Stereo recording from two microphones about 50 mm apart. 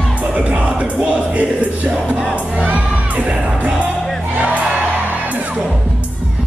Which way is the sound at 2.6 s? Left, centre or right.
Right.